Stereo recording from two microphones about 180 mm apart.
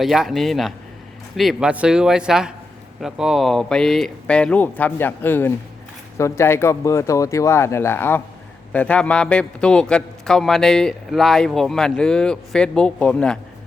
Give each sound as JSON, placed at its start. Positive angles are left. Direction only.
{"t": 0.0, "sound": "a man's voice", "side_deg": 0}